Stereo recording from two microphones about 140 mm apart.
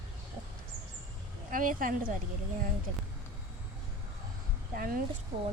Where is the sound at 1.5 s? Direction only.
80° right.